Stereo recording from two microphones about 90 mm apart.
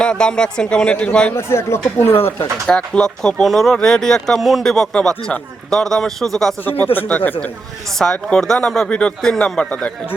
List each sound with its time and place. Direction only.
0.0 s speech: 10° left (ahead or behind)
1.4 s speech: 30° left (ahead or behind)
2.6 s speech: 10° left (ahead or behind)
6.7 s speech: 20° left (ahead or behind)
7.9 s speech: 5° left (ahead or behind)